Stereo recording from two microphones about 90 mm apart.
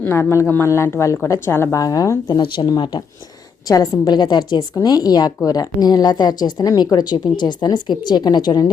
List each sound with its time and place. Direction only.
0.0 s a woman's voice: 30° left (ahead or behind)
1.7 s speech: 40° left (ahead or behind); by 3.0 s 60° left (ahead or behind)
4.0 s speech: 55° left (ahead or behind)